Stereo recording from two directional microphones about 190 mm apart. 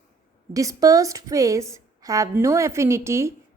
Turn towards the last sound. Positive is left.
turn(degrees=-15)  # may be behind; listen again after turning